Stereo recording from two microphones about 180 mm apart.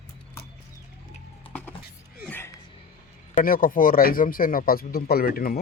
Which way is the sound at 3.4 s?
50° left (ahead or behind).